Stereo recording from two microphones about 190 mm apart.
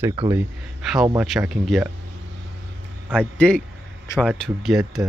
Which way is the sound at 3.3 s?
5° left (ahead or behind).